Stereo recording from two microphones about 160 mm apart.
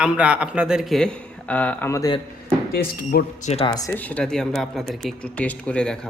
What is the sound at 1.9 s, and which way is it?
Speech, 20° left (ahead or behind).